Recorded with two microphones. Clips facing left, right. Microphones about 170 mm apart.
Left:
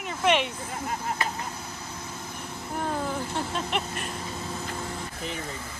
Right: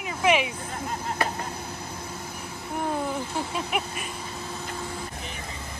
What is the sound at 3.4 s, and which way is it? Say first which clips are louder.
Speech: right 1 dB; 5° right (ahead or behind).